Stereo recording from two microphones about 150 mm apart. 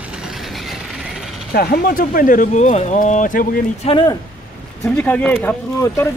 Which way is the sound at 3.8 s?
35° left (ahead or behind).